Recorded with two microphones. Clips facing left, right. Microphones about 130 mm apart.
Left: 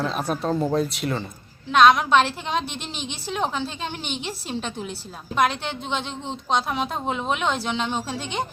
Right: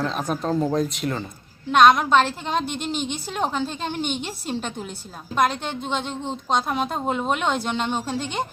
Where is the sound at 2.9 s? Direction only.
50° right (ahead or behind).